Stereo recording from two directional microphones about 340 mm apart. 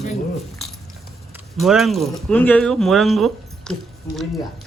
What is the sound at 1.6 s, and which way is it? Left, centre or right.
A woman's voice, centre.